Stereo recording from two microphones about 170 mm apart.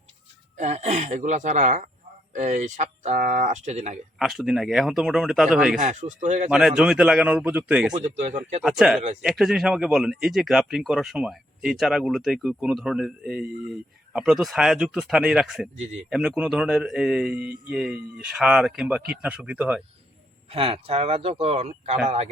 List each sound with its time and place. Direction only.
0.5 s speech: 40° right (ahead or behind)
4.2 s speech: centre (ahead or behind)
5.7 s speech: 45° right (ahead or behind)
6.5 s speech: centre (ahead or behind)
7.9 s speech: 45° right (ahead or behind)
8.6 s speech: centre (ahead or behind)
20.5 s speech: 35° right (ahead or behind)